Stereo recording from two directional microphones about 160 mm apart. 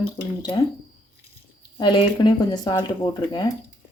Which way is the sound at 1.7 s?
30° left (ahead or behind).